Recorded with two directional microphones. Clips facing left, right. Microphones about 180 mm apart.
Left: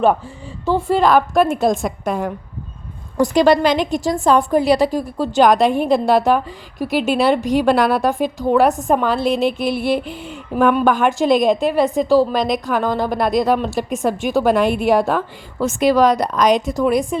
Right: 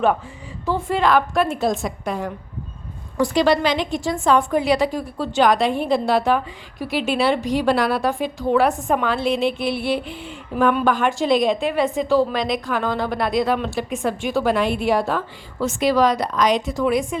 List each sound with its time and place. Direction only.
0.6 s a woman's voice: 30° left (ahead or behind)